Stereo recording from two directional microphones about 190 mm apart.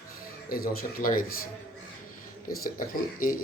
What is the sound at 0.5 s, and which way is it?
Speech, 50° left (ahead or behind).